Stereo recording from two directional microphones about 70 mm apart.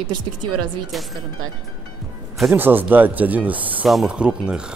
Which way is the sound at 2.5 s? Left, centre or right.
Right.